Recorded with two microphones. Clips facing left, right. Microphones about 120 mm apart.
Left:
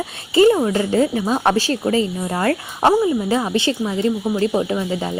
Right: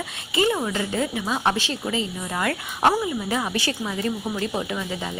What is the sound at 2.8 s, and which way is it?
Speech, 25° left (ahead or behind).